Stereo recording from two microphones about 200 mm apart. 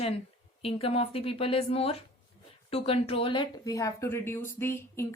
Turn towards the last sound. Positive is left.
turn(degrees=10)  # may be behind; listen again after turning